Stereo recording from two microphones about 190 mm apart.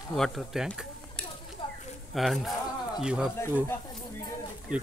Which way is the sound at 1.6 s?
25° left (ahead or behind).